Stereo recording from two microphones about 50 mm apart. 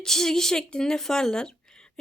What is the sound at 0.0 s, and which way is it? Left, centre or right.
Speech, centre.